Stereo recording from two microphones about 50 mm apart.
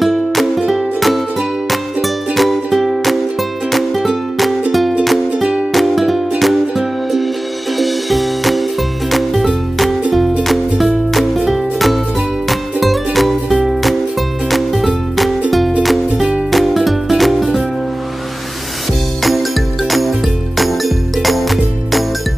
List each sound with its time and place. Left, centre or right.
0.0 s music: centre
5.4 s music: centre
5.7 s music: centre
19.2 s music: centre